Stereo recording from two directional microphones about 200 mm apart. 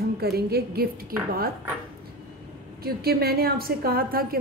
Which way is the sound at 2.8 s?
50° right (ahead or behind).